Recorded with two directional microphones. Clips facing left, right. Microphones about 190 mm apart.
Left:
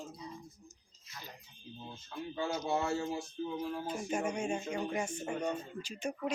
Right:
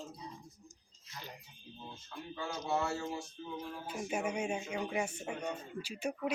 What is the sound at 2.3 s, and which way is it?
Speech, 20° left (ahead or behind).